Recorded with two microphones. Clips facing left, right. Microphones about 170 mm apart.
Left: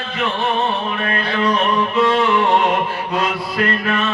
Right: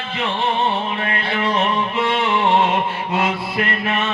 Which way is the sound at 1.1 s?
25° right (ahead or behind).